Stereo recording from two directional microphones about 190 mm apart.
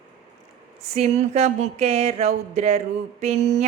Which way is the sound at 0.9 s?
35° right (ahead or behind).